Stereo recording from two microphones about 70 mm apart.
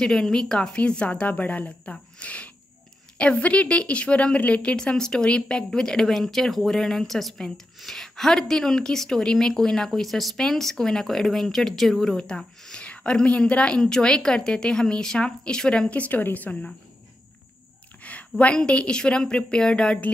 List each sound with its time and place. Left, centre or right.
0.0 s a woman's voice: centre
15.9 s a woman's voice: left
18.0 s a sound: centre
18.4 s a woman's voice: centre